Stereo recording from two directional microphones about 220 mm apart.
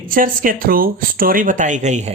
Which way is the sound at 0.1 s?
40° right (ahead or behind).